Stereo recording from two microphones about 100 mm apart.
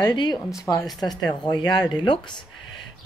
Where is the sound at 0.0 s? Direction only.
45° left (ahead or behind).